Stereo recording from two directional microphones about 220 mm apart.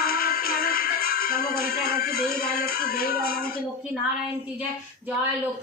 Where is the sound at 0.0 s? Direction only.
40° left (ahead or behind).